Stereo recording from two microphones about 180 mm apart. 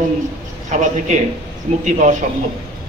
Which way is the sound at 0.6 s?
45° right (ahead or behind).